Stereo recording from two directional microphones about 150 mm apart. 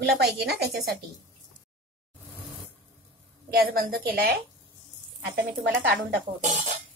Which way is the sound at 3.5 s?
80° right.